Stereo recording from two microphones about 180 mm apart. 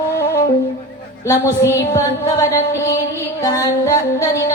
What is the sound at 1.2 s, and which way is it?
A woman's voice, 15° left (ahead or behind).